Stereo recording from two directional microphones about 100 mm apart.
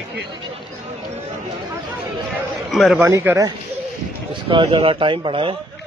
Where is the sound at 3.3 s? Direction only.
20° right (ahead or behind).